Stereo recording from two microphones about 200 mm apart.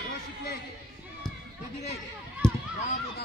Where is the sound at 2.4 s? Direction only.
5° left (ahead or behind).